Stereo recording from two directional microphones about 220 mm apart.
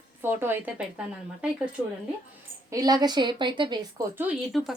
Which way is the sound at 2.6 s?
15° right (ahead or behind).